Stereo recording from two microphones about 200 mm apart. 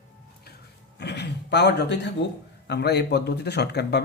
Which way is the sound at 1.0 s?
60° left (ahead or behind).